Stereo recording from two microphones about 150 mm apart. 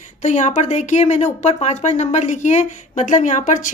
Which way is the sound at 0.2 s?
55° left (ahead or behind).